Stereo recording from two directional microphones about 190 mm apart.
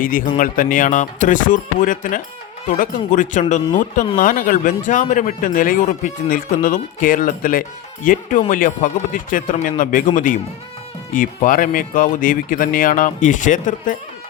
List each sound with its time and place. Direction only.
0.0 s speech: 45° left (ahead or behind)
11.1 s speech: 45° left (ahead or behind)